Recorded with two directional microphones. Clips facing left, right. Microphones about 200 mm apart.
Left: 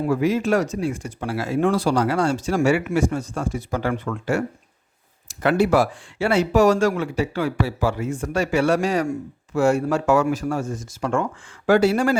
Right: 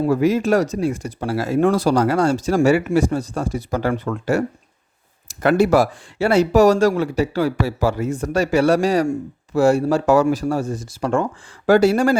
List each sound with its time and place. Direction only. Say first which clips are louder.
0.0 s speech: right 3 dB; 40° right (ahead or behind)